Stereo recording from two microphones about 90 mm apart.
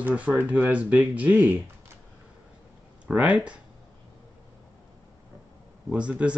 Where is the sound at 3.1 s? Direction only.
15° right (ahead or behind).